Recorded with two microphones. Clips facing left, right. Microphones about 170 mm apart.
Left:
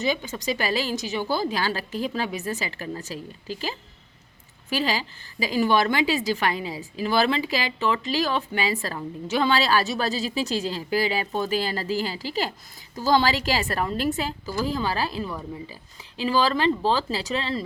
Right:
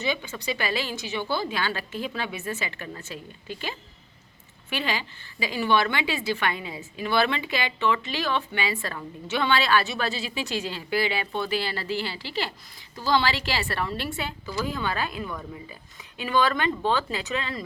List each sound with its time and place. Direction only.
0.0 s a woman's voice: 40° left (ahead or behind)
4.7 s a woman's voice: 35° left (ahead or behind)